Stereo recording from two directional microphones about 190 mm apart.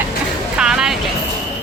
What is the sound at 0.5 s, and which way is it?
Speech, 5° right (ahead or behind).